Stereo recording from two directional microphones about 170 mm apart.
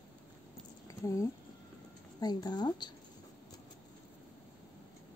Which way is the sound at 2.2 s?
25° left (ahead or behind).